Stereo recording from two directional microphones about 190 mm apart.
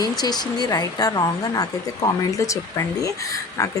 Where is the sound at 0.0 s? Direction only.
20° left (ahead or behind).